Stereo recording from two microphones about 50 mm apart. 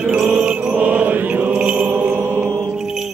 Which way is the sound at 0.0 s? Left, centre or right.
Centre.